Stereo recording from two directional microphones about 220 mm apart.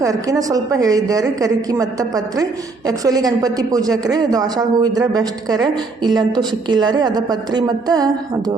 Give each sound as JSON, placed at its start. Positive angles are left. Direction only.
{"t": 0.0, "sound": "a woman's voice", "side_deg": -15}